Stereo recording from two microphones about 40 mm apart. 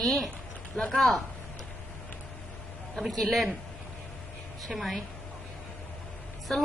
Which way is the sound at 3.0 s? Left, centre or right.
Centre.